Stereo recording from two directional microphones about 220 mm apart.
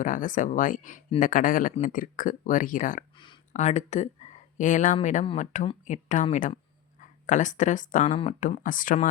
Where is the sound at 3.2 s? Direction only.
25° left (ahead or behind).